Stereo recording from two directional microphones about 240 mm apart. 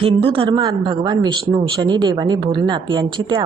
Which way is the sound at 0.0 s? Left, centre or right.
Right.